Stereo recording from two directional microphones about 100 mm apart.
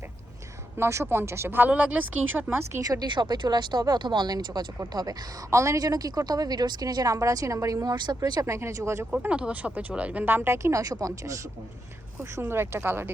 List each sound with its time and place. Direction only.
0.8 s speech: 25° right (ahead or behind)
2.8 s speech: 40° right (ahead or behind)
9.2 s speech: 15° right (ahead or behind); by 11.3 s 35° right (ahead or behind)
12.2 s speech: 25° right (ahead or behind)